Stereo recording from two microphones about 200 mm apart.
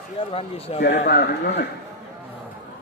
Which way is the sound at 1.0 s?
50° left (ahead or behind).